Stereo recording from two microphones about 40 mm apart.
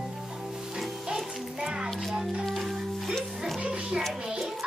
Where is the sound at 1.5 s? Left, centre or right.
Right.